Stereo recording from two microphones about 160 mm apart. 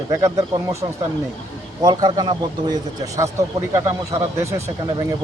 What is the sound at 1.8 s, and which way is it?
Speech, 25° right (ahead or behind).